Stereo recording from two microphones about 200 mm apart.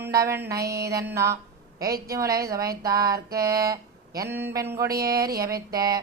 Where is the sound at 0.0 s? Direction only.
15° right (ahead or behind).